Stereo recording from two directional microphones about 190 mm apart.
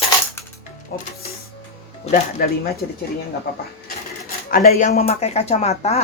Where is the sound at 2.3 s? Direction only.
55° left (ahead or behind).